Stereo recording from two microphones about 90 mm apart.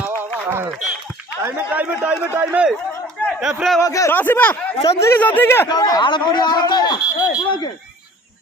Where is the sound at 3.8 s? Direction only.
40° left (ahead or behind).